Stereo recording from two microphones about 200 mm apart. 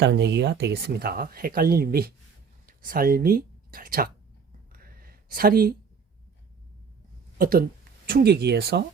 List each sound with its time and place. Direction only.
0.0 s speech: 55° right (ahead or behind)
4.7 s a sound: 45° right (ahead or behind)
7.3 s speech: 45° right (ahead or behind)